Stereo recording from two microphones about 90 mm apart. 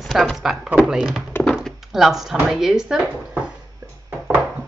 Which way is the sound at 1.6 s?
5° right (ahead or behind).